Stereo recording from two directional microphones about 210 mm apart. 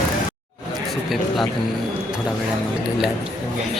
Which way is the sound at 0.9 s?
Centre (ahead or behind).